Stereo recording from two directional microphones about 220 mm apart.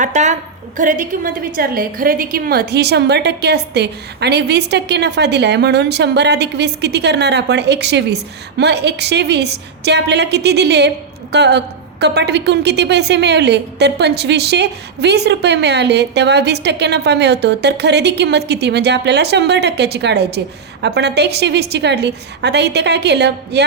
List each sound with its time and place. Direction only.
0.0 s a woman's voice: 30° right (ahead or behind); by 23.6 s 50° right (ahead or behind)